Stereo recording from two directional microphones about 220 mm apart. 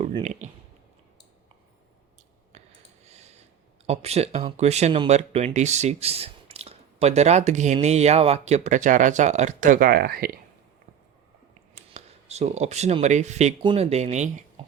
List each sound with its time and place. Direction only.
0.0 s speech: 30° right (ahead or behind)
2.5 s a sound: 30° right (ahead or behind)
3.8 s speech: 30° right (ahead or behind); by 10.4 s 45° right (ahead or behind)
11.9 s speech: 30° right (ahead or behind)